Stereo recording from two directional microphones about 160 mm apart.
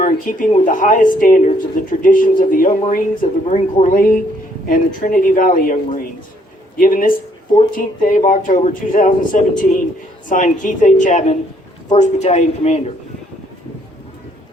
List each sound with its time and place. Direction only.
0.0 s speech: 55° left (ahead or behind)